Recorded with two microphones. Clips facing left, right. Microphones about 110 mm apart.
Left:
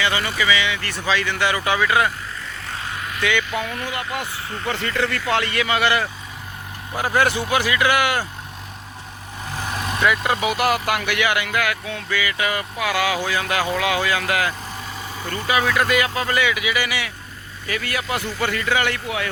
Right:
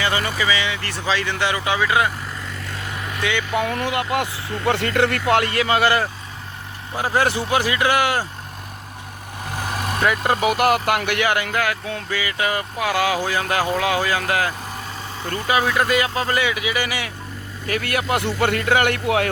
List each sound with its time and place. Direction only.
0.0 s speech: 35° right (ahead or behind); by 2.0 s 20° right (ahead or behind)
3.2 s speech: 25° right (ahead or behind)
3.6 s speech: 65° right (ahead or behind); by 4.3 s 80° right
4.7 s speech: 65° right (ahead or behind); by 6.1 s 40° right (ahead or behind)
6.9 s speech: 25° right (ahead or behind)
10.0 s speech: 40° right (ahead or behind)
17.7 s speech: 50° right (ahead or behind)
19.0 s speech: 65° right (ahead or behind)